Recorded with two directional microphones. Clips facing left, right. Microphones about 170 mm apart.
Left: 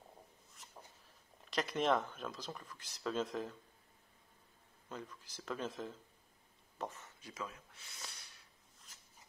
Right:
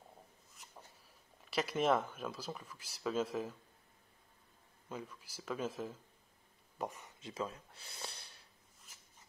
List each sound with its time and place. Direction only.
1.5 s speech: 5° right (ahead or behind)
4.8 s speech: 10° right (ahead or behind); by 8.3 s 30° right (ahead or behind)